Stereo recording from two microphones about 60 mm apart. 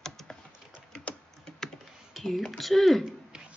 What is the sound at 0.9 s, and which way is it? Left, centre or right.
Typing, left.